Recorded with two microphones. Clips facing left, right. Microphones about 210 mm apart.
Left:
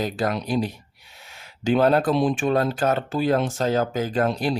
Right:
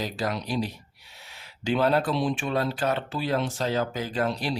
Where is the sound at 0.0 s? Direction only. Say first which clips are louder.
Left 5 dB; 55° left (ahead or behind).